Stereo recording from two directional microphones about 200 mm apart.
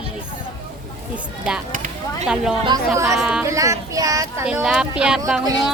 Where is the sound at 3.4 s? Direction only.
15° right (ahead or behind).